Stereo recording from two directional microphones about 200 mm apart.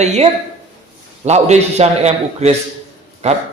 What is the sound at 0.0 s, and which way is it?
A man's voice, 35° right (ahead or behind).